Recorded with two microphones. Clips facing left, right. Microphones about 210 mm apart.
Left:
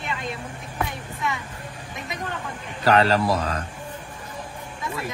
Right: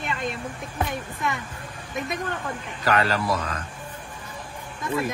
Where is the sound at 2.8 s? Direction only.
30° left (ahead or behind).